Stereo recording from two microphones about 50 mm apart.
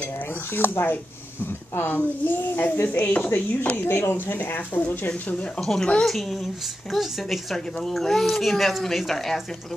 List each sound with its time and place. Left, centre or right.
0.6 s speech: left
3.8 s speech: left
5.6 s a woman's voice: centre